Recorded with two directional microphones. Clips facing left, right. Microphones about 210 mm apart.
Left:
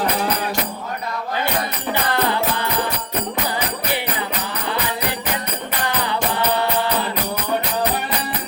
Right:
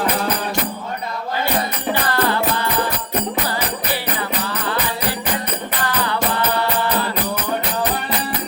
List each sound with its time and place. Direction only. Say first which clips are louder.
1.9 s music: right 1 dB; 15° left (ahead or behind)